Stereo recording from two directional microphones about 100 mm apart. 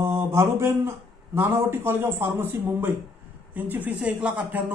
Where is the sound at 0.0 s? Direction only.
25° right (ahead or behind).